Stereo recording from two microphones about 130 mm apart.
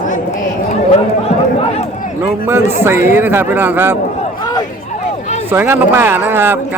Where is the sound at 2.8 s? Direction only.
20° right (ahead or behind).